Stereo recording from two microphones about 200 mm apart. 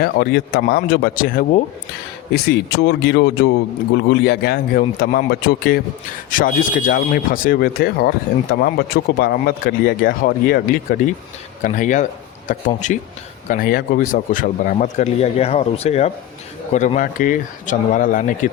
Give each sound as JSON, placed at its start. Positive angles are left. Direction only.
{"t": 0.0, "sound": "speech", "side_deg": 50}